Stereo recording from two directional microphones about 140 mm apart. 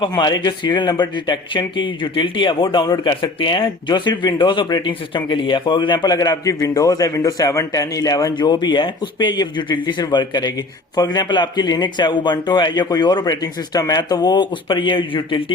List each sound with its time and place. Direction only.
0.0 s speech: 30° left (ahead or behind)